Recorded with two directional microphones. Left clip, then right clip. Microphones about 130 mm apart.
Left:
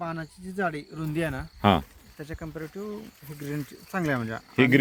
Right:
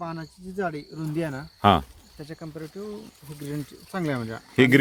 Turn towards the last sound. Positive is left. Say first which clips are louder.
# right 3 dB
turn(degrees=-25)  # may be behind; listen again after turning